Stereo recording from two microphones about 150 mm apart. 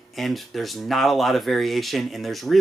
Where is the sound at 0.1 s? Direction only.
Centre (ahead or behind).